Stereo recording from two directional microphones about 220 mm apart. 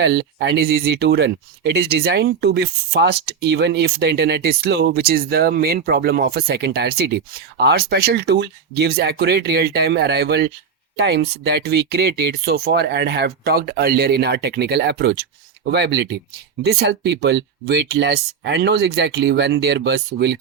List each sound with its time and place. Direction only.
0.0 s speech: 50° right (ahead or behind)